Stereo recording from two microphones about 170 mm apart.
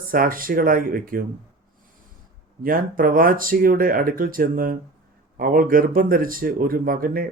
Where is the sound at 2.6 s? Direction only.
55° right (ahead or behind).